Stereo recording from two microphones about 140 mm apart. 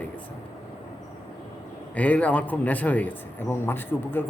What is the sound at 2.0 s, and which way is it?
A man's voice, 10° left (ahead or behind).